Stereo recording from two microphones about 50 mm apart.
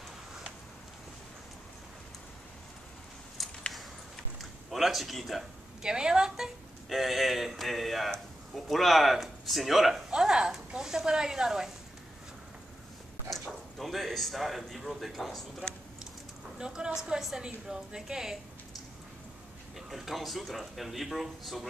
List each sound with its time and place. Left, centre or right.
3.4 s a sound: centre
5.9 s speech: centre
6.9 s a man's voice: centre
10.1 s speech: centre
13.3 s a man's voice: centre
16.5 s speech: centre
19.9 s a man's voice: centre